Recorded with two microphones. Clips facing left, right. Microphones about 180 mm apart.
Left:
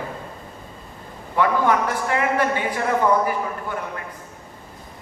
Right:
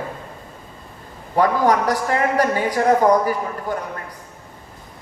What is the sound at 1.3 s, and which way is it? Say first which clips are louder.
A man's voice: right 2 dB; 40° right (ahead or behind).